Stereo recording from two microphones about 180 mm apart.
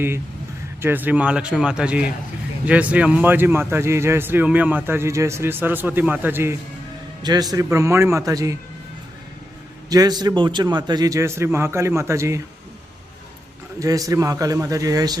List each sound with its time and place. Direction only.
0.8 s a man's voice: 10° right (ahead or behind)
9.9 s a man's voice: 20° right (ahead or behind)
13.7 s a man's voice: 20° right (ahead or behind)